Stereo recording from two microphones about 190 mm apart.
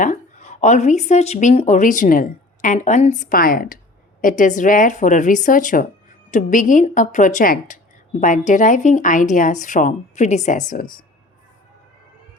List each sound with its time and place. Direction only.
0.0 s speech: 40° left (ahead or behind)